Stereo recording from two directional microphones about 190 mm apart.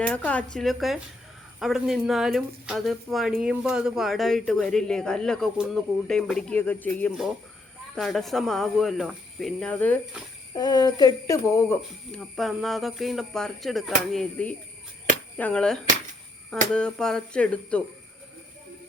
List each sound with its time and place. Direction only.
0.3 s speech: 5° left (ahead or behind)
7.9 s speech: centre (ahead or behind)
10.5 s speech: 20° left (ahead or behind)
12.1 s speech: centre (ahead or behind)